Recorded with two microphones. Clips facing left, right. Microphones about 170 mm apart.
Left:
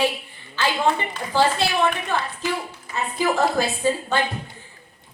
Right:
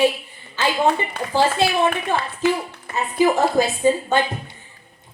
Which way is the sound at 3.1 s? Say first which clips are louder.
Right 4 dB; 15° right (ahead or behind).